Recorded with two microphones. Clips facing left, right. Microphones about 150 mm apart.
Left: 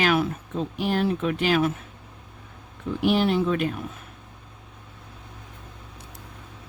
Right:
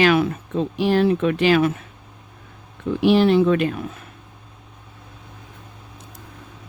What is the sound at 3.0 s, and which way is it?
Speech, 90° right.